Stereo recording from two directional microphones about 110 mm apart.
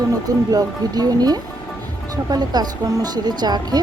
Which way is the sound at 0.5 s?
35° right (ahead or behind).